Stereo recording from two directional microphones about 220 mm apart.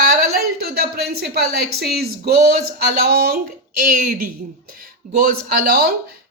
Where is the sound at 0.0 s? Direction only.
45° right (ahead or behind).